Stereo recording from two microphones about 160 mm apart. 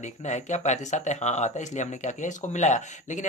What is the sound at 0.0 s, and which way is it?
Speech, 45° left (ahead or behind).